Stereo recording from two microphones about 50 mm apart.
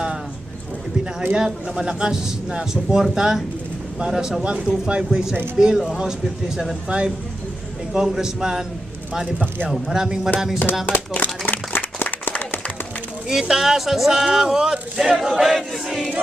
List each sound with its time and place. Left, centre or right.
1.3 s speech: centre
9.6 s speech: centre
10.8 s a sound: left
12.3 s run: left
13.5 s speech: centre